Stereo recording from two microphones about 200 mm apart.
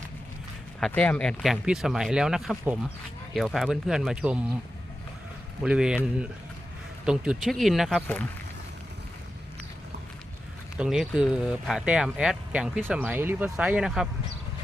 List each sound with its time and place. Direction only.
0.8 s speech: 5° left (ahead or behind)
5.6 s speech: 5° right (ahead or behind)
7.0 s speech: 5° right (ahead or behind)
10.8 s speech: centre (ahead or behind)